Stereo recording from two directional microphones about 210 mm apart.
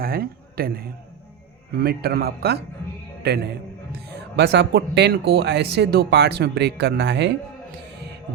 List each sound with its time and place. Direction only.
0.0 s a man's voice: 45° right (ahead or behind)